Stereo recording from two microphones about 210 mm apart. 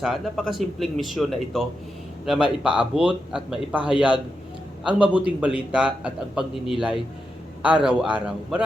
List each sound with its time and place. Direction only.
0.0 s a man's voice: centre (ahead or behind)
5.1 s a man's voice: 5° right (ahead or behind)
7.7 s a man's voice: 25° right (ahead or behind)
8.1 s a man's voice: 5° right (ahead or behind)